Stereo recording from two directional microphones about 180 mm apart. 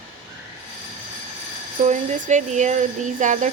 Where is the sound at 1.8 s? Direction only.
40° right (ahead or behind).